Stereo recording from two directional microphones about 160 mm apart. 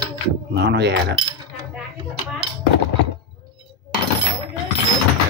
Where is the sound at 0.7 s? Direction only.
90° right.